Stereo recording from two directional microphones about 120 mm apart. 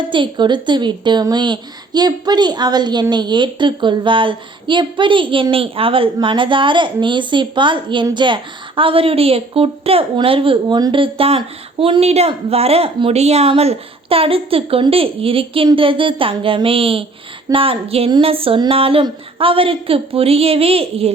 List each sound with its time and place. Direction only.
0.1 s a woman's voice: 40° right (ahead or behind)